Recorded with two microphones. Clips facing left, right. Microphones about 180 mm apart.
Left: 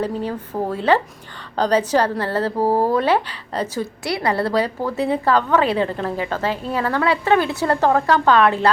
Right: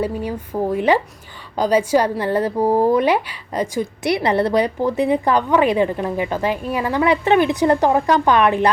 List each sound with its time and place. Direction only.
0.0 s a woman's voice: 10° right (ahead or behind)